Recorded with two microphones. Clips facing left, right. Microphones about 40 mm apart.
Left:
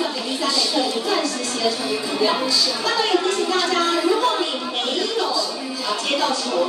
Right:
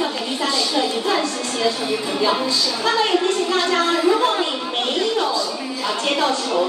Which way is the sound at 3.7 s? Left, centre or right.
Centre.